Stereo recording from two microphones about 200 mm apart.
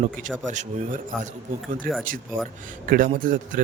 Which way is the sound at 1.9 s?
45° right (ahead or behind).